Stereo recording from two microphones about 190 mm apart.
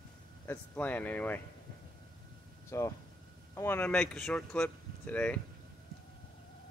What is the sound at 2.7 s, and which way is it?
Speech, 15° left (ahead or behind).